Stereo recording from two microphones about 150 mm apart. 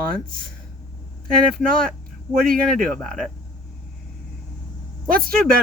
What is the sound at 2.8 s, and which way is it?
Speech, centre (ahead or behind).